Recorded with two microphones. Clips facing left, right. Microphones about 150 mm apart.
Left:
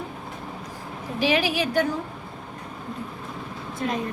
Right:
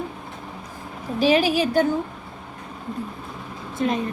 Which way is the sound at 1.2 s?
30° right (ahead or behind).